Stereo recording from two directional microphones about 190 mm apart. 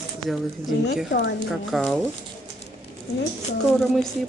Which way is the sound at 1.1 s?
65° left (ahead or behind).